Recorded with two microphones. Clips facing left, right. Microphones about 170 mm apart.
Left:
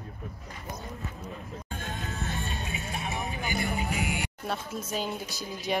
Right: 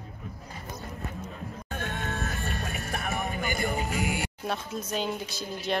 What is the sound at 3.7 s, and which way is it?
Music, 40° right (ahead or behind).